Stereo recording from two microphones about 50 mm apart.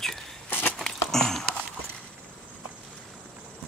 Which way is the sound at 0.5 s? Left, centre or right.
Left.